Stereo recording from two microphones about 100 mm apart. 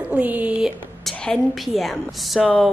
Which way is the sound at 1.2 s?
5° left (ahead or behind).